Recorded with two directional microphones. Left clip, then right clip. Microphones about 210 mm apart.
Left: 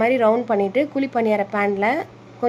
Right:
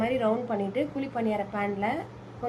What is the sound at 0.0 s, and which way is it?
A woman's voice, 45° left (ahead or behind).